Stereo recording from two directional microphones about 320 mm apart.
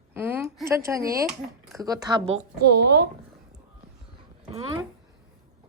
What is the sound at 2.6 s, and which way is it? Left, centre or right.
Speech, right.